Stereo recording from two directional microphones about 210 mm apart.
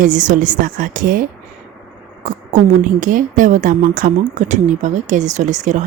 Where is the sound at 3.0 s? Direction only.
40° right (ahead or behind).